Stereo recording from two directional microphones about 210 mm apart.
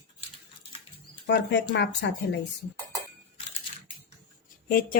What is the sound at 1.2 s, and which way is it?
Speech, 55° left (ahead or behind).